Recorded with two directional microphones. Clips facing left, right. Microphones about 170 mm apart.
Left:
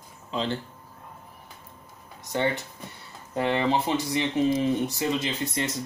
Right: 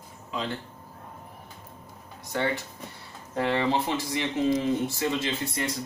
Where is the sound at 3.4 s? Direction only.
20° left (ahead or behind).